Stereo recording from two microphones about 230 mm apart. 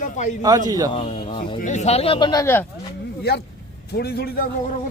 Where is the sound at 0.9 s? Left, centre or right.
Left.